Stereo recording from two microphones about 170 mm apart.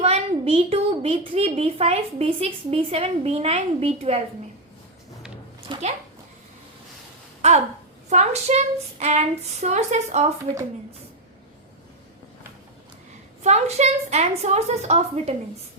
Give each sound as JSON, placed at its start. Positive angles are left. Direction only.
{"t": 0.0, "sound": "a child's voice", "side_deg": -35}
{"t": 5.7, "sound": "speech", "side_deg": -30}
{"t": 7.4, "sound": "a child's voice", "side_deg": -40}
{"t": 13.4, "sound": "a child's voice", "side_deg": -40}